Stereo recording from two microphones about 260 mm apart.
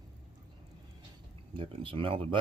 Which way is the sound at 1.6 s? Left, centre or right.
Right.